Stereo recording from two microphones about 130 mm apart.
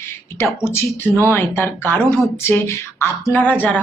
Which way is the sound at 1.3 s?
15° left (ahead or behind).